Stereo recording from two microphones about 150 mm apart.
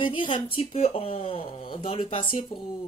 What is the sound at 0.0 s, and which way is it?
Speech, 35° left (ahead or behind).